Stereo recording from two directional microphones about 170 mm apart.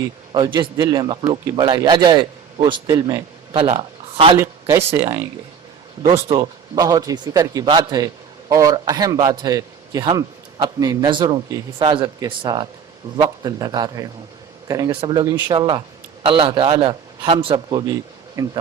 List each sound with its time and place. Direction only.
0.3 s a man's voice: 30° right (ahead or behind)
4.4 s speech: 15° right (ahead or behind)
6.0 s speech: 20° right (ahead or behind)
18.4 s speech: 20° right (ahead or behind)